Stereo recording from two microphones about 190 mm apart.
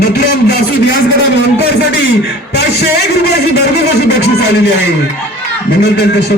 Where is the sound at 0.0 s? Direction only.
60° left (ahead or behind).